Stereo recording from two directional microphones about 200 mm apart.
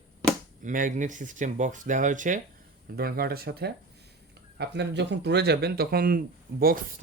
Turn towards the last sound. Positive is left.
turn(degrees=-50)  # may be behind; listen again after turning